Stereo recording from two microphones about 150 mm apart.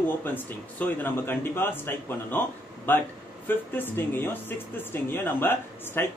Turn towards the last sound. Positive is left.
turn(degrees=15)  # may be behind; listen again after turning